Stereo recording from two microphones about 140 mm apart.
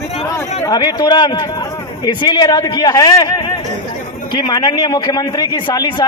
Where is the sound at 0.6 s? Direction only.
25° left (ahead or behind).